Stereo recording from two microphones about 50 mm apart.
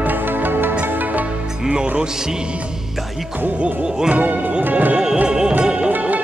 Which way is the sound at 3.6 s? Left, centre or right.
Right.